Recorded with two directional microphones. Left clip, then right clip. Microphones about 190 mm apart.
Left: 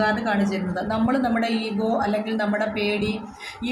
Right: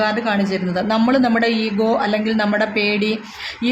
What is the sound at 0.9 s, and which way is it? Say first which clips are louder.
A woman's voice: right 7 dB; 45° right (ahead or behind).